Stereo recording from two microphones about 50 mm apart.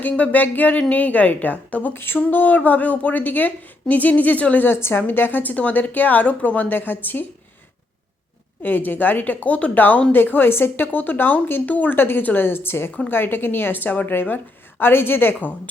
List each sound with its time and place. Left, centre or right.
0.0 s a woman's voice: left
1.9 s a woman's voice: left
4.6 s a woman's voice: left
8.6 s a woman's voice: left
9.7 s a woman's voice: left
11.9 s a woman's voice: left